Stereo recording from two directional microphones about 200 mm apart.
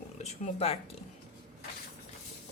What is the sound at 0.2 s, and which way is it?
Speech, 30° left (ahead or behind).